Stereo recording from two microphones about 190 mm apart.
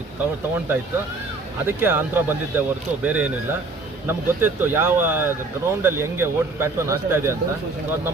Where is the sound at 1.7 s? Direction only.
10° right (ahead or behind).